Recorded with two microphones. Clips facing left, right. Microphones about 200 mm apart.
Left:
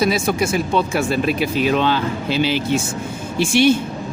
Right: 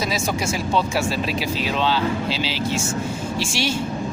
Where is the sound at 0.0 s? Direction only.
55° left (ahead or behind).